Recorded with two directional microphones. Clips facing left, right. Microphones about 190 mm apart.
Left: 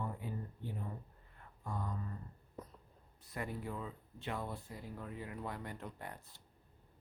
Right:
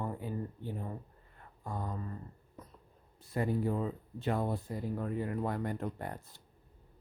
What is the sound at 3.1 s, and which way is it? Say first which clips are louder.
Speech: right 10 dB; 30° right (ahead or behind).